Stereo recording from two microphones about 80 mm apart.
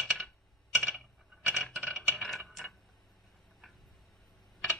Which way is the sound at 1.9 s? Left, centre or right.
Centre.